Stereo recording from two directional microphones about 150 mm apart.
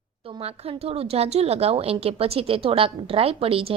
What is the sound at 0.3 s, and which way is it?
A woman's voice, 40° right (ahead or behind).